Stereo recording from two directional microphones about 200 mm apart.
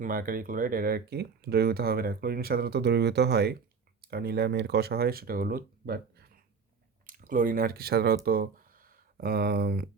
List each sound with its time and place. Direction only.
0.0 s speech: 45° right (ahead or behind)